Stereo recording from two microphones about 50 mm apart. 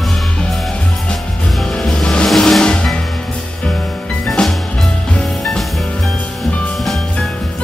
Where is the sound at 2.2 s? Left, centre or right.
Centre.